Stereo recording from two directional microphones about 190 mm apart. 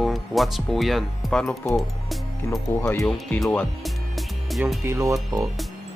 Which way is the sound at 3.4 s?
5° left (ahead or behind).